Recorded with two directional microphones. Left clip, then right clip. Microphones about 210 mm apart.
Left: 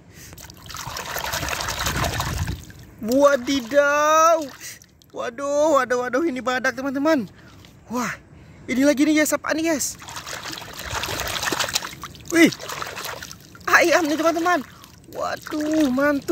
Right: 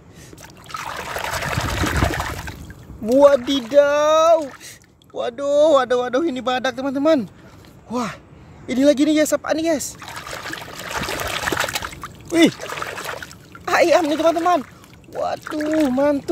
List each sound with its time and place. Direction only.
0.7 s liquid: 10° right (ahead or behind)
3.1 s speech: 5° right (ahead or behind)
9.9 s trickle: 10° right (ahead or behind)
12.5 s a sound: 10° right (ahead or behind)
13.7 s speech: 5° right (ahead or behind)
15.4 s speech: 10° right (ahead or behind)